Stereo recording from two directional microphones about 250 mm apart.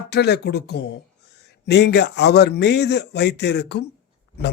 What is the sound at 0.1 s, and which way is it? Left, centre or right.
A man's voice, left.